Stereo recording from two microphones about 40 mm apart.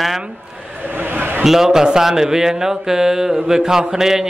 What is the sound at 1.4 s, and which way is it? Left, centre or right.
Speech, centre.